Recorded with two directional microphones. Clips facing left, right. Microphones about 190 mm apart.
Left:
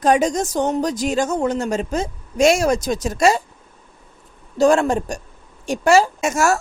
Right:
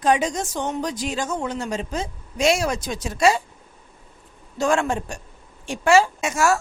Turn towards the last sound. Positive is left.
turn(degrees=45)  # may be behind; listen again after turning